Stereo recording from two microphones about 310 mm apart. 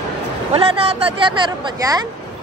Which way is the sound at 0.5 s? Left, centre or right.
Centre.